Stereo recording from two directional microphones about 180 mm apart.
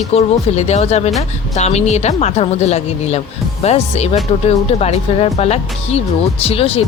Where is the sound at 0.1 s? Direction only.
35° left (ahead or behind).